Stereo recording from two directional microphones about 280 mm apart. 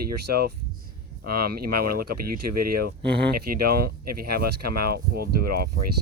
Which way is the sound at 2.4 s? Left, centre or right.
Right.